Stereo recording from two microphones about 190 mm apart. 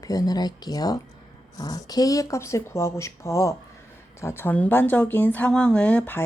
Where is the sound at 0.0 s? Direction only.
20° left (ahead or behind).